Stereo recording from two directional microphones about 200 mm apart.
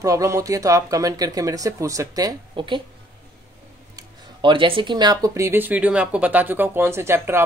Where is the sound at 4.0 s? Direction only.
25° right (ahead or behind).